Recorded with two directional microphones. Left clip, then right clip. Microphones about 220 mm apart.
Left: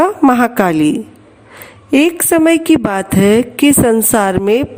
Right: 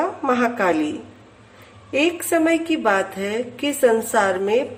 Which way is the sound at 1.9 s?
50° left (ahead or behind).